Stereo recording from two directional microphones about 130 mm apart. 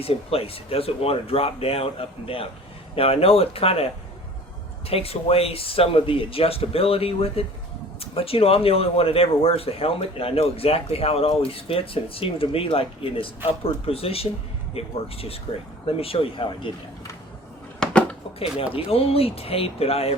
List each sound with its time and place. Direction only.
0.0 s speech: 50° left (ahead or behind)
4.9 s speech: 50° left (ahead or behind)
17.7 s a sound: 10° left (ahead or behind)
18.9 s speech: 50° left (ahead or behind)